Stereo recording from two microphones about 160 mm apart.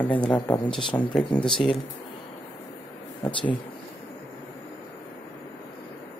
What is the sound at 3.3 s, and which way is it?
Speech, 30° left (ahead or behind).